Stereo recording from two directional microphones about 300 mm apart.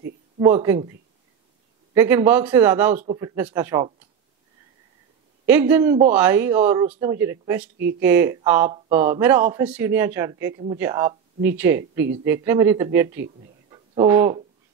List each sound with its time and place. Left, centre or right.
0.4 s speech: centre
2.0 s speech: centre
5.5 s speech: centre
7.7 s speech: right
8.0 s speech: centre
13.7 s a sound: centre